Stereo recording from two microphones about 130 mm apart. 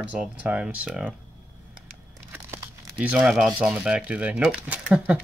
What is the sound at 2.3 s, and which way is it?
Speech, 20° right (ahead or behind).